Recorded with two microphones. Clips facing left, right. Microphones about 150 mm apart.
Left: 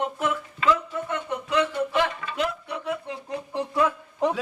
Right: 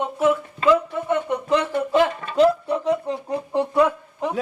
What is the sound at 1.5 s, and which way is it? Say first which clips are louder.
Speech: right 3 dB; 30° right (ahead or behind).